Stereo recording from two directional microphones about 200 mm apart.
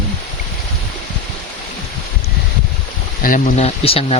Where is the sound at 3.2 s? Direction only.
40° left (ahead or behind).